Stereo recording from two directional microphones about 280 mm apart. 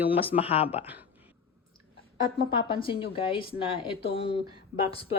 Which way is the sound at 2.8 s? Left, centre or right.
Centre.